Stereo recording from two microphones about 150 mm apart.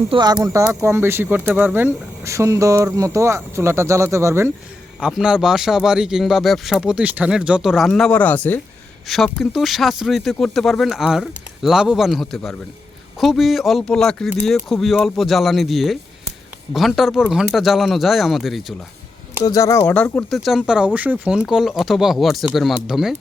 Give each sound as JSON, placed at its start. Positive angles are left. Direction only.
{"t": 0.1, "sound": "speech", "side_deg": -30}
{"t": 0.7, "sound": "speech", "side_deg": -15}
{"t": 4.9, "sound": "speech", "side_deg": -5}
{"t": 9.0, "sound": "speech", "side_deg": 0}
{"t": 19.5, "sound": "speech", "side_deg": 20}
{"t": 20.1, "sound": "speech", "side_deg": 0}